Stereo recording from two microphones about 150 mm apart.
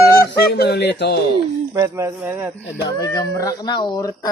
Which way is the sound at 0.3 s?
90° left.